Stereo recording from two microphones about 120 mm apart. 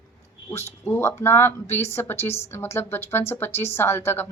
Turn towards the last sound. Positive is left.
turn(degrees=20)  # may be behind; listen again after turning